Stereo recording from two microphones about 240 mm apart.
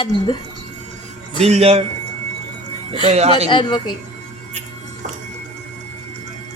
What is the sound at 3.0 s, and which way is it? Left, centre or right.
Speech, right.